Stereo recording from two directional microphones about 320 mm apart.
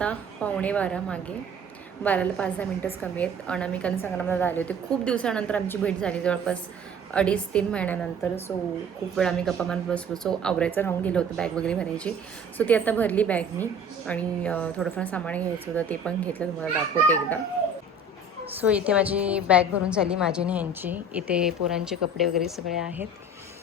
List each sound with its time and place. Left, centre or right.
0.0 s a woman's voice: centre
18.6 s a woman's voice: centre